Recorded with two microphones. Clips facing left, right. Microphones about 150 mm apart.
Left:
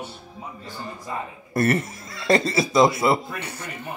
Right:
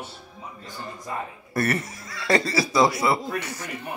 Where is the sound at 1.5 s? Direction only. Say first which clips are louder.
Left 4 dB; 25° left (ahead or behind).